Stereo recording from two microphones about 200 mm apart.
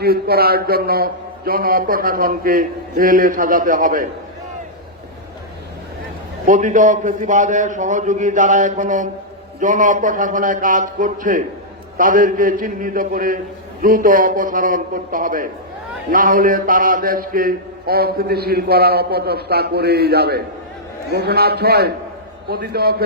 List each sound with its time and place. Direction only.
0.0 s mantra: 50° right (ahead or behind)
6.4 s a man's voice: 40° right (ahead or behind)
11.9 s mantra: 40° right (ahead or behind)